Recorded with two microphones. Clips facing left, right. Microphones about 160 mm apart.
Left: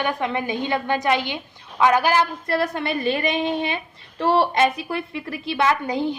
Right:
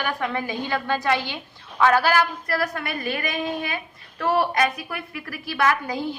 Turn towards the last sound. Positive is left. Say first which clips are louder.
# left 2 dB
turn(degrees=20)  # may be behind; listen again after turning